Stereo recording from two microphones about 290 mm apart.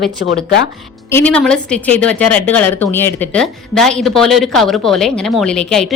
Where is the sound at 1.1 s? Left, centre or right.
Centre.